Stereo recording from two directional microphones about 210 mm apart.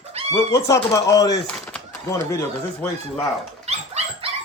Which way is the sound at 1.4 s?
10° left (ahead or behind).